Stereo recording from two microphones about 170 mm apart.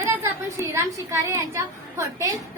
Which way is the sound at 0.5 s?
15° right (ahead or behind).